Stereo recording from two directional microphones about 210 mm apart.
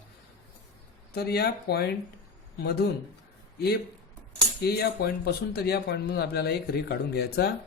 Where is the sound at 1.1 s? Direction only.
50° left (ahead or behind).